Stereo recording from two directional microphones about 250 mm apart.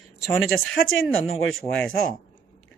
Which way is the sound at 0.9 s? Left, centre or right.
Left.